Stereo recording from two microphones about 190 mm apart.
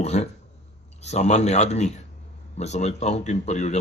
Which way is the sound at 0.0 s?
35° left (ahead or behind).